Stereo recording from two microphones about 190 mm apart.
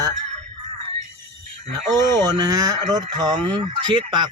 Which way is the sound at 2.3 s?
20° right (ahead or behind).